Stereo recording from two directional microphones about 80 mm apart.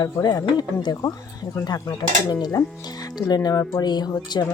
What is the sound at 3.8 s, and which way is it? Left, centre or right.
Speech, left.